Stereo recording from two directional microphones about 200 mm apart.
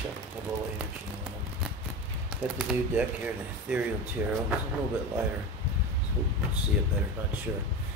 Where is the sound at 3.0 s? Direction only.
5° right (ahead or behind).